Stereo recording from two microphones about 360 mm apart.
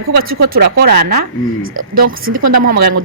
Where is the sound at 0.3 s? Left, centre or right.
Right.